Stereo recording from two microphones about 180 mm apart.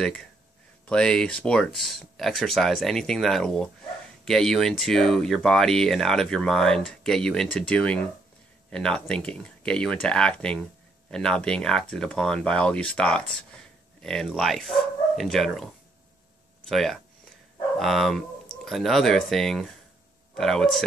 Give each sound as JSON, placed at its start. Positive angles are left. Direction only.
{"t": 0.8, "sound": "speech", "side_deg": 5}